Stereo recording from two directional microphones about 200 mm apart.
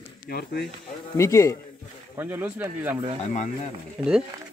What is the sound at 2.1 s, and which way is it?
Speech, 10° right (ahead or behind).